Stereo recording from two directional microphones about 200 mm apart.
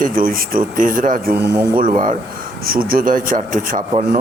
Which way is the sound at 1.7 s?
45° right (ahead or behind).